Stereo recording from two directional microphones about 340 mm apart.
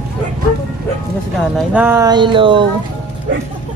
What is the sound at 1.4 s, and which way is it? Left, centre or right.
Speech, centre.